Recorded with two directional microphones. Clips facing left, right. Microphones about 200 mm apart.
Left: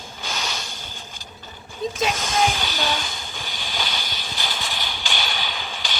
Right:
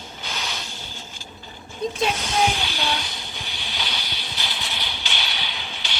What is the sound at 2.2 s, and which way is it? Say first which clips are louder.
Hiss: even; 45° left (ahead or behind).